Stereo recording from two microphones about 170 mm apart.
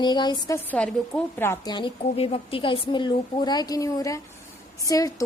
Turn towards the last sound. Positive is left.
turn(degrees=20)  # may be behind; listen again after turning